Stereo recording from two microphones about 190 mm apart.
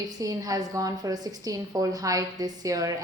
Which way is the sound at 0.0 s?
20° right (ahead or behind).